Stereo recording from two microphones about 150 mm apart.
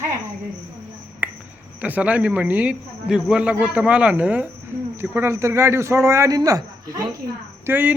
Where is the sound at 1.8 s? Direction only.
10° right (ahead or behind).